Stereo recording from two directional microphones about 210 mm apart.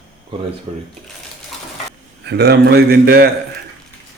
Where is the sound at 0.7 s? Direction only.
30° right (ahead or behind).